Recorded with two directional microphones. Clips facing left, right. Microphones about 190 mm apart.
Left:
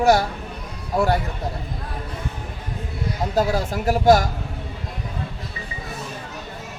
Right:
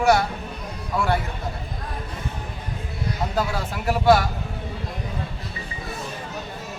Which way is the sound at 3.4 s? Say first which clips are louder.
Left 8 dB; 40° left (ahead or behind).